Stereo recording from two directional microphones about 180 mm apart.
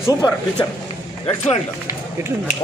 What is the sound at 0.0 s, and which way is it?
Speech, 15° left (ahead or behind).